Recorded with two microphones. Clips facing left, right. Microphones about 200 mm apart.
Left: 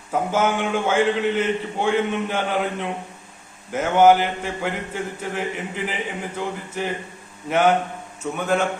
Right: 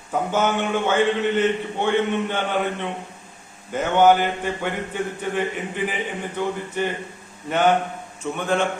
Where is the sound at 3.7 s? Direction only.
10° left (ahead or behind).